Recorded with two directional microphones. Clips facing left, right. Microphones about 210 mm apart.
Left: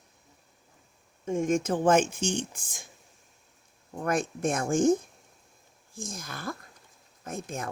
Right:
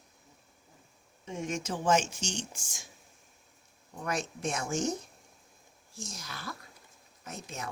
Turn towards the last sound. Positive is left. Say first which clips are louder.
# left 6 dB
turn(degrees=50)  # may be behind; listen again after turning